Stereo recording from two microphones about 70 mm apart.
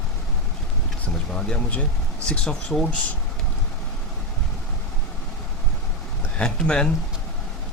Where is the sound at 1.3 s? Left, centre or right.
Centre.